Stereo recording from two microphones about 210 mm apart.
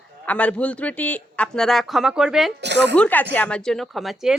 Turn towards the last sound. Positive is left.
turn(degrees=0)  # may be behind; listen again after turning